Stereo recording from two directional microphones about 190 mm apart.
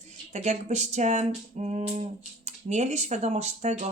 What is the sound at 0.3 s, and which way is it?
Speech, 35° right (ahead or behind).